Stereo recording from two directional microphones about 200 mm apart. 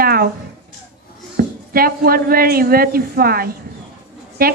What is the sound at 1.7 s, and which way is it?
A woman's voice, 45° right (ahead or behind).